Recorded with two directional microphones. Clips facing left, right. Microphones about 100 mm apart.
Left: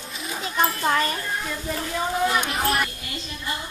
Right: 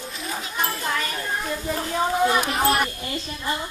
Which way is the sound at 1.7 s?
25° right (ahead or behind).